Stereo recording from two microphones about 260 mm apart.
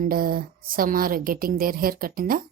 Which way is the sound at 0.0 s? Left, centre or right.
Right.